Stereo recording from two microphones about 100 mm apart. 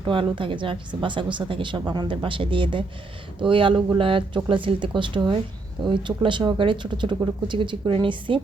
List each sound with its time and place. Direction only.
0.0 s speech: 60° right (ahead or behind)